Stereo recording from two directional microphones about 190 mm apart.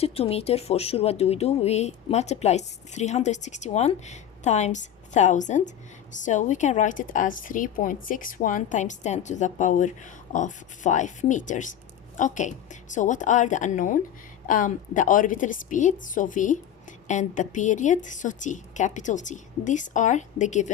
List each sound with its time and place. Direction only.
0.0 s a woman's voice: 30° left (ahead or behind)